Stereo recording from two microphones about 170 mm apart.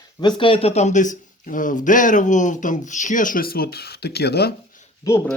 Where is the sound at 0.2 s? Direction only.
30° left (ahead or behind); by 4.8 s 70° left (ahead or behind).